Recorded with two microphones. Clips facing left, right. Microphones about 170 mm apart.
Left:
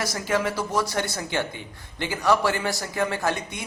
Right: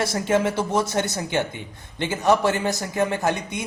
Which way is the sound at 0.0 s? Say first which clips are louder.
Right 4 dB; 25° right (ahead or behind).